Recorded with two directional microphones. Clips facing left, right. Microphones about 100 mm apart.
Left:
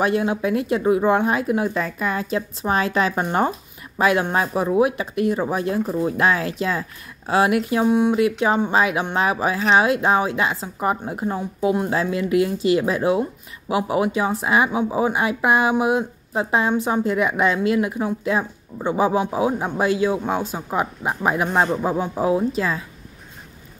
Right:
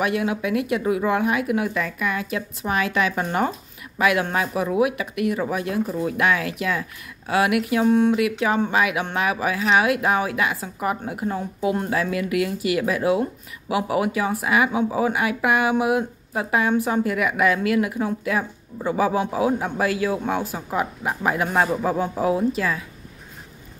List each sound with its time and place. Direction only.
0.0 s speech: 30° left (ahead or behind)
7.8 s speech: 15° left (ahead or behind)
8.2 s speech: 30° left (ahead or behind)